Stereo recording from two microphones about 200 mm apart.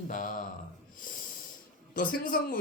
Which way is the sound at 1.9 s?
45° left (ahead or behind).